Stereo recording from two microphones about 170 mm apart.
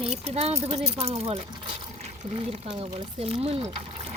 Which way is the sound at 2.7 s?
35° right (ahead or behind).